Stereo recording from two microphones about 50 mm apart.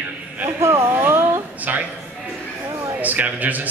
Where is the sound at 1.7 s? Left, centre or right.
Right.